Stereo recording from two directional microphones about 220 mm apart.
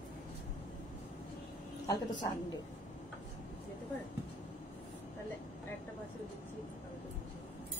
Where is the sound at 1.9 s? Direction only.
20° left (ahead or behind).